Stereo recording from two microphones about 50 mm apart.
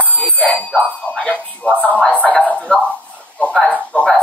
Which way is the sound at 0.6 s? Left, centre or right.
Centre.